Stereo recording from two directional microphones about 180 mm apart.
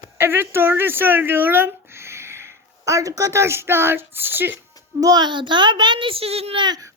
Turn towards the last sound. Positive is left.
turn(degrees=-20)  # may be behind; listen again after turning